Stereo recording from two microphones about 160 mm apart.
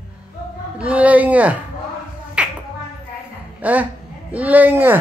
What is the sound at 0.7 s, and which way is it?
Speech, 10° right (ahead or behind).